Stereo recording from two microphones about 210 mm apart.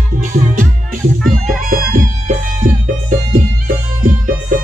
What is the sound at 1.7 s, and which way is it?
Music, 40° right (ahead or behind).